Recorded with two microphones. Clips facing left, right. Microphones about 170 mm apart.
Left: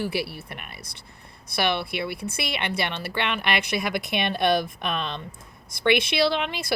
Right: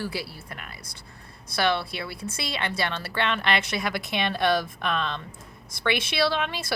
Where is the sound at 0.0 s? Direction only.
25° left (ahead or behind).